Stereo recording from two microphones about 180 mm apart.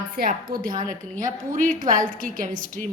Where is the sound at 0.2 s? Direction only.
50° right (ahead or behind).